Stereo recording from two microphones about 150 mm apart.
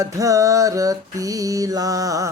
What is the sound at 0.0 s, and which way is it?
Mantra, 20° right (ahead or behind).